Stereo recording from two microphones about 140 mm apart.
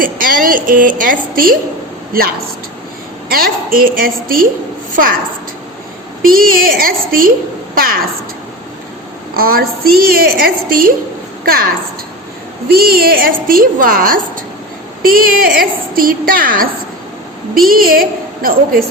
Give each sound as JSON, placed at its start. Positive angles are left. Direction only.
{"t": 0.0, "sound": "a woman's voice", "side_deg": -85}
{"t": 3.2, "sound": "a woman's voice", "side_deg": -90}
{"t": 6.2, "sound": "a woman's voice", "side_deg": -90}
{"t": 9.3, "sound": "a woman's voice", "side_deg": -90}